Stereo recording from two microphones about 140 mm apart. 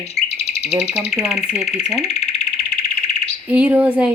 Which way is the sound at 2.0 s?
50° left (ahead or behind).